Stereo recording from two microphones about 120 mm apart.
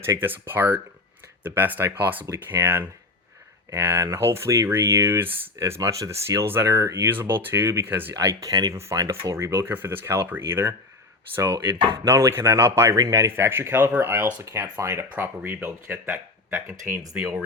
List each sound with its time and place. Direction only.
0.0 s speech: 20° right (ahead or behind)